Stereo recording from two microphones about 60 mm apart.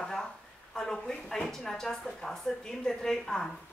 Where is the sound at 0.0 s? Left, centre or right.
Centre.